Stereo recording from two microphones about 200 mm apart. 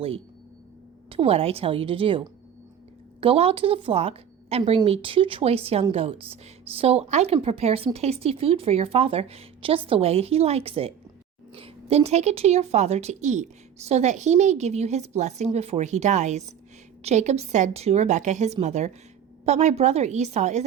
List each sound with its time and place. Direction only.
1.1 s a woman's voice: 30° right (ahead or behind)